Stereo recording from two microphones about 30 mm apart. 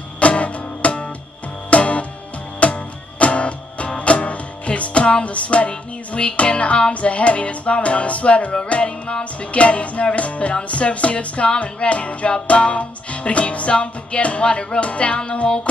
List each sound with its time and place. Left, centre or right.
0.2 s music: left
12.3 s music: left